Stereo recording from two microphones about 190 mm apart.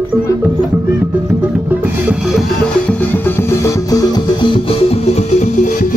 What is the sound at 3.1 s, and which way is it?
Music, 10° left (ahead or behind).